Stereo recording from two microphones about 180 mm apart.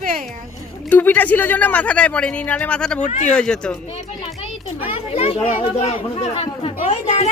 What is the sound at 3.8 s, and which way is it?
Speech, 30° left (ahead or behind).